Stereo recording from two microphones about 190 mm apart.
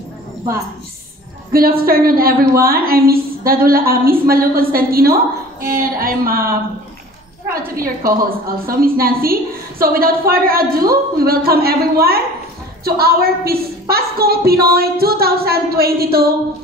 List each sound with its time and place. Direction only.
1.5 s a woman's voice: 50° right (ahead or behind)
7.7 s a woman's voice: 50° right (ahead or behind)